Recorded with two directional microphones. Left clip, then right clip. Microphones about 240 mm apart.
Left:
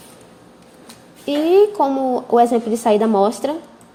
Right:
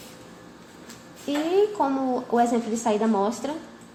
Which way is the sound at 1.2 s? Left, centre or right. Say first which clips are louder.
Left 9 dB; left.